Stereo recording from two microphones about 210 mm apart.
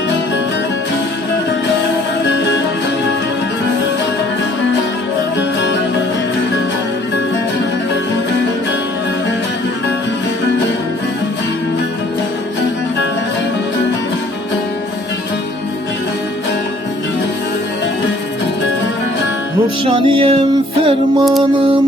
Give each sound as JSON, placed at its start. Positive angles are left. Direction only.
{"t": 19.9, "sound": "music", "side_deg": -25}